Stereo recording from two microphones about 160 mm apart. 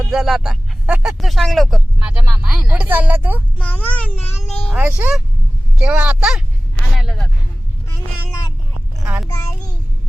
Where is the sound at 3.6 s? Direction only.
10° left (ahead or behind).